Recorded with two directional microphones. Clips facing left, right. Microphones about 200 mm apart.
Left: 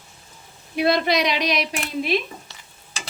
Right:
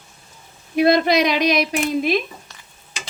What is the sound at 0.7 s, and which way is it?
Speech, 45° right (ahead or behind).